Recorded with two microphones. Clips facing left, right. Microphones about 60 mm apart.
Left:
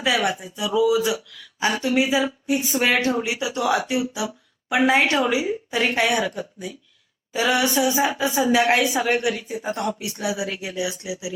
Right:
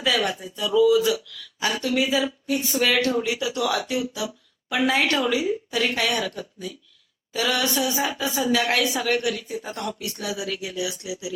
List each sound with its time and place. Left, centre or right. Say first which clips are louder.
0.0 s speech: left 2 dB; centre
9.6 s speech: left 5 dB; centre